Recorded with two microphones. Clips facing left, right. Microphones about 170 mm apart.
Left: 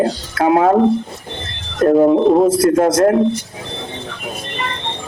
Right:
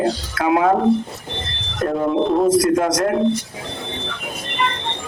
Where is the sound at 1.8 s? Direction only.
40° left (ahead or behind).